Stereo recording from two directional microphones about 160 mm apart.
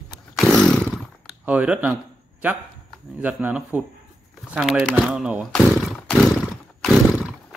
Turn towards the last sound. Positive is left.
turn(degrees=0)  # may be behind; listen again after turning